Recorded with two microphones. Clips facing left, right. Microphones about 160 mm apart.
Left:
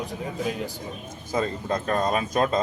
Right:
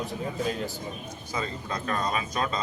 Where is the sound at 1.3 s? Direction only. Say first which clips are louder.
Left 7 dB; 45° left (ahead or behind).